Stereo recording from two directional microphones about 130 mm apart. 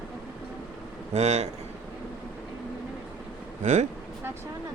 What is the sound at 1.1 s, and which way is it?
Speech, 60° right (ahead or behind).